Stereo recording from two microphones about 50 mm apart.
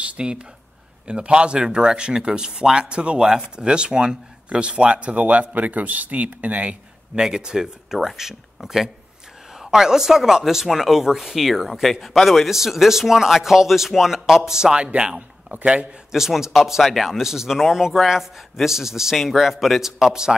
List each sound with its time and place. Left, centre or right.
0.2 s a man's voice: centre
7.2 s a man's voice: centre
16.1 s a man's voice: centre